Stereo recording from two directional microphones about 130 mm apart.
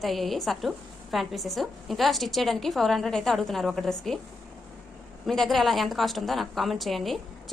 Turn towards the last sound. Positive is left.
turn(degrees=0)  # may be behind; listen again after turning